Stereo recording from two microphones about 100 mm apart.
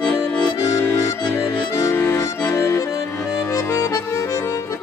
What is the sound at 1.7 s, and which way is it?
Accordion, 30° left (ahead or behind).